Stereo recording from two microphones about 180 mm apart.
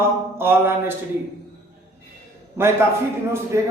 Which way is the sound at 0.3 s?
15° right (ahead or behind).